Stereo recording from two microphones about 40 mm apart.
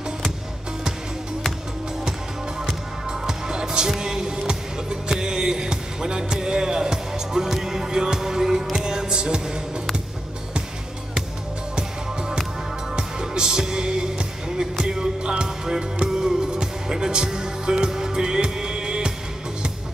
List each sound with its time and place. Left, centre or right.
2.6 s music: centre
11.7 s music: centre